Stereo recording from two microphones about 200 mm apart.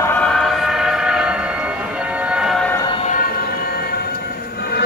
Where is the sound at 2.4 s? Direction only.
Centre (ahead or behind).